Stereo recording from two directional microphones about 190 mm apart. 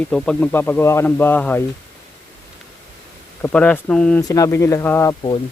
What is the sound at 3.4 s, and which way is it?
Speech, 5° left (ahead or behind).